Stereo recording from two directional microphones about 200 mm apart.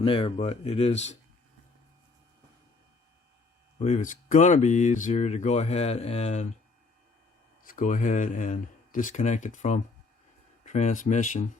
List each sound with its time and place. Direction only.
0.0 s speech: 30° left (ahead or behind)
3.8 s speech: 35° left (ahead or behind)
7.6 s speech: 45° left (ahead or behind)